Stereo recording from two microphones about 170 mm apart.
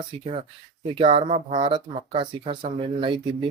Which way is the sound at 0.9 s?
35° right (ahead or behind).